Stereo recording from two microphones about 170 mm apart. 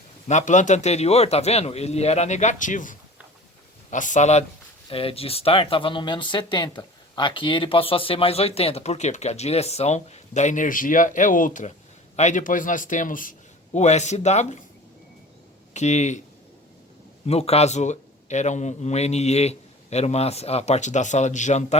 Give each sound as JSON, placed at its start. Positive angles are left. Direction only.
{"t": 0.3, "sound": "a man's voice", "side_deg": 45}
{"t": 13.7, "sound": "a man's voice", "side_deg": 40}
{"t": 15.7, "sound": "a man's voice", "side_deg": 40}
{"t": 17.2, "sound": "speech", "side_deg": 35}